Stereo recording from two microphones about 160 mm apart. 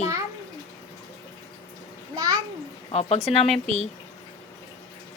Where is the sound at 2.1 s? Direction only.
25° right (ahead or behind).